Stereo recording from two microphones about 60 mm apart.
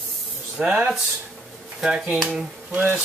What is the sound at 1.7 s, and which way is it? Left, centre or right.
Speech, centre.